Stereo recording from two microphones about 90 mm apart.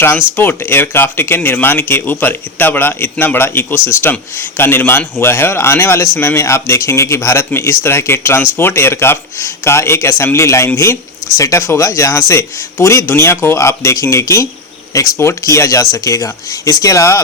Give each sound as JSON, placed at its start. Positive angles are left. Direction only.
{"t": 0.0, "sound": "a man's voice", "side_deg": 25}